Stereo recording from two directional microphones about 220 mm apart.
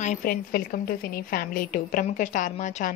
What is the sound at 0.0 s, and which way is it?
A woman's voice, 35° left (ahead or behind).